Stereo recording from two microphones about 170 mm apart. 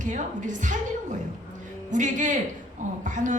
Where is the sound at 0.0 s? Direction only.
45° right (ahead or behind).